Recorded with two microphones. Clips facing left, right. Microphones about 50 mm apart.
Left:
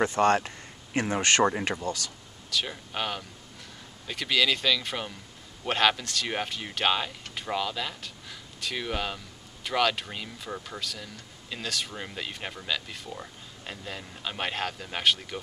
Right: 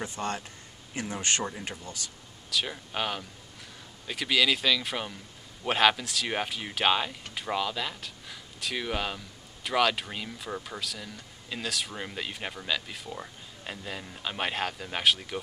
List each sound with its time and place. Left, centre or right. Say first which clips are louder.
0.0 s speech: left 11 dB; left
0.9 s speech: left 7 dB; left
1.6 s speech: left 8 dB; left
2.5 s speech: even; centre